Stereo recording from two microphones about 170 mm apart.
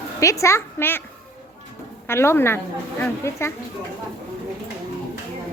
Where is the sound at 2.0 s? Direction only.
15° left (ahead or behind).